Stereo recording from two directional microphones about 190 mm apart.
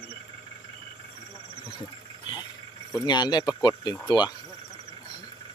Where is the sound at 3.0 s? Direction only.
20° left (ahead or behind).